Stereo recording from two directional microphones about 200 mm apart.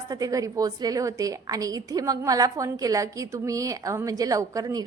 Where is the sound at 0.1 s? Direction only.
15° right (ahead or behind).